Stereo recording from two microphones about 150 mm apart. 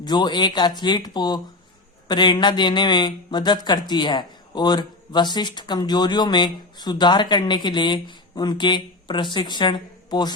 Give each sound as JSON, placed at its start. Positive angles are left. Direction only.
{"t": 0.0, "sound": "speech", "side_deg": 30}